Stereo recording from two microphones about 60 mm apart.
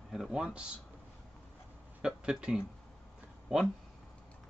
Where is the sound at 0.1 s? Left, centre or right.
Centre.